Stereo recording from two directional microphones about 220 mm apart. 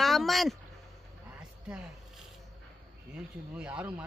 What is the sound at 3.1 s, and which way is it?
Speech, 5° right (ahead or behind).